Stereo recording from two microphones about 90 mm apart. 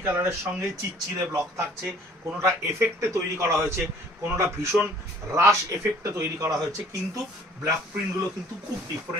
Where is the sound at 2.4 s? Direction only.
35° right (ahead or behind).